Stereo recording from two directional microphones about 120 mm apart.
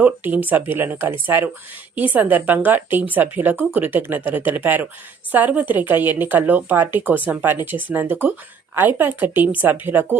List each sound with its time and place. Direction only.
0.0 s a woman's voice: 15° right (ahead or behind)